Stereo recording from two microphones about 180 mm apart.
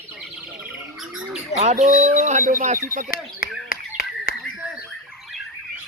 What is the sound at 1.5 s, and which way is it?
Speech, 35° right (ahead or behind).